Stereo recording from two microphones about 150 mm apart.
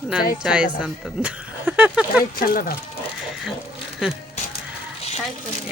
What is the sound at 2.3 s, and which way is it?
Speech, 75° left (ahead or behind).